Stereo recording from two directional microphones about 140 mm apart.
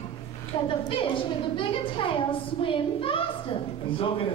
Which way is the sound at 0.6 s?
40° left (ahead or behind).